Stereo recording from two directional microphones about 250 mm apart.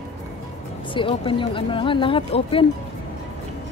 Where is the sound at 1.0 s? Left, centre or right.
Centre.